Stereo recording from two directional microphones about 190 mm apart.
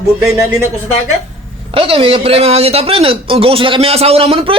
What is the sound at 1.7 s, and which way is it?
Speech, 30° right (ahead or behind).